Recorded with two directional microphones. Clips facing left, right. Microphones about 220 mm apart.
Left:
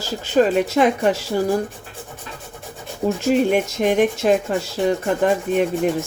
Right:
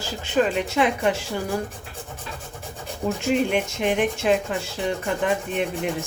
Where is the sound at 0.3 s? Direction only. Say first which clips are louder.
Left 5 dB; 40° left (ahead or behind).